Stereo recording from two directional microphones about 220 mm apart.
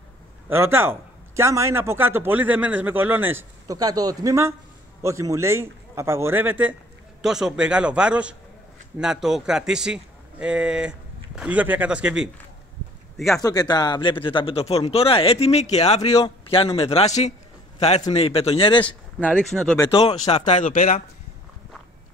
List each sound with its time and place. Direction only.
0.5 s a man's voice: 10° right (ahead or behind)
13.4 s a man's voice: 15° left (ahead or behind)
19.1 s a man's voice: 5° left (ahead or behind)
19.8 s speech: 25° left (ahead or behind)